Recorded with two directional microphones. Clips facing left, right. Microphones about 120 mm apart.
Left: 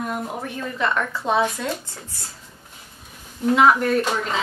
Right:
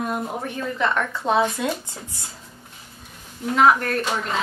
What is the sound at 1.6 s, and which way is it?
Speech, 15° right (ahead or behind).